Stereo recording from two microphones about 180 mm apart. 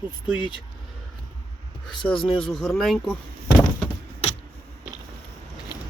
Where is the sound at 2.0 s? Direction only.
25° left (ahead or behind).